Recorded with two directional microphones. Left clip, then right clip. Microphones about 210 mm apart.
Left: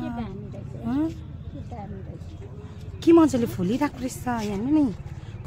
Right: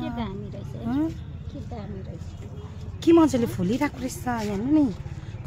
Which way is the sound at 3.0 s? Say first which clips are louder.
Left 1 dB; 5° left (ahead or behind).